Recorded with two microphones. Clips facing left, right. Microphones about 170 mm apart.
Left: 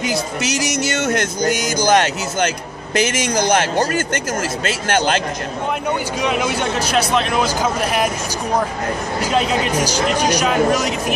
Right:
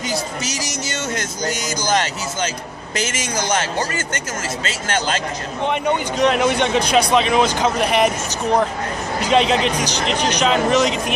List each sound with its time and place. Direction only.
0.1 s speech: 65° left (ahead or behind)
6.1 s speech: 5° left (ahead or behind)
9.2 s speech: 5° left (ahead or behind)